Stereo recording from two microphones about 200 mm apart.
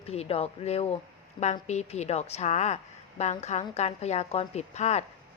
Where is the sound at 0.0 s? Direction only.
30° left (ahead or behind).